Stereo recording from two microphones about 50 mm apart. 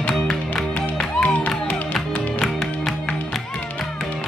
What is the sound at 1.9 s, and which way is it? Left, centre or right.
Music, centre.